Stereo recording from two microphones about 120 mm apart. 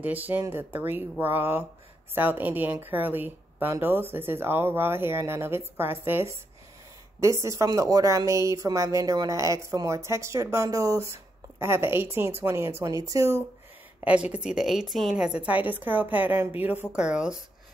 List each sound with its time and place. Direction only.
0.0 s a woman's voice: 15° right (ahead or behind)
14.0 s speech: 10° right (ahead or behind)